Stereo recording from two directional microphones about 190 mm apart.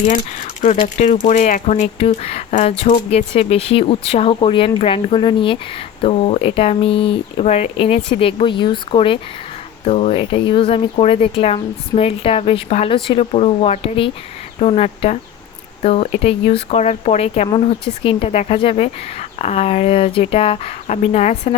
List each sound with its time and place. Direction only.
0.6 s speech: 40° left (ahead or behind)